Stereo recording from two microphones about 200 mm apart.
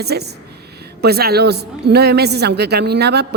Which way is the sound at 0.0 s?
55° right (ahead or behind).